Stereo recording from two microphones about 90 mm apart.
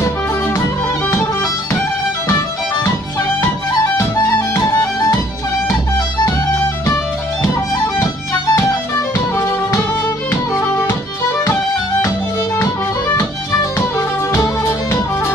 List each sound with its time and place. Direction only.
2.2 s music: 35° left (ahead or behind)
7.8 s music: 35° left (ahead or behind)
13.7 s music: 35° left (ahead or behind)